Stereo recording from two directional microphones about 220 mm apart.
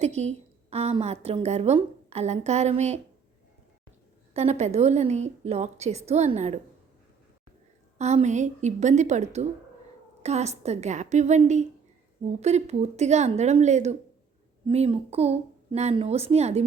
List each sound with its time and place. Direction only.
0.0 s a woman's voice: 30° right (ahead or behind)
4.4 s a woman's voice: 30° right (ahead or behind)
7.9 s a woman's voice: 30° right (ahead or behind)